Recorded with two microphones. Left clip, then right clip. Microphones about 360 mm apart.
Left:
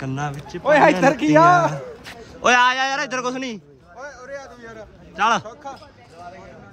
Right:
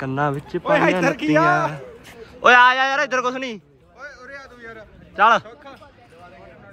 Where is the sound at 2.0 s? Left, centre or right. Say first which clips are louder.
Right 4 dB; centre.